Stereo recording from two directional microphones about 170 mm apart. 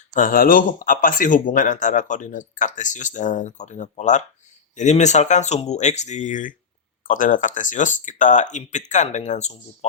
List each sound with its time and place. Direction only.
0.1 s a man's voice: 55° left (ahead or behind)